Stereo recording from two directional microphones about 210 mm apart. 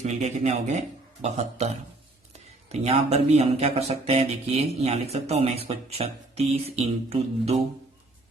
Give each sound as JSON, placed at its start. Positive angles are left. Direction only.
{"t": 0.0, "sound": "speech", "side_deg": -35}
{"t": 2.7, "sound": "speech", "side_deg": -30}